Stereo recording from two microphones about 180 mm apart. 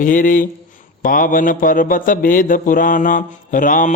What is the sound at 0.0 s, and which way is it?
Speech, 50° left (ahead or behind).